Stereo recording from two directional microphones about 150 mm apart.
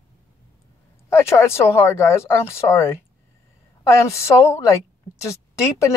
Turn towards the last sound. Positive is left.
turn(degrees=20)  # may be behind; listen again after turning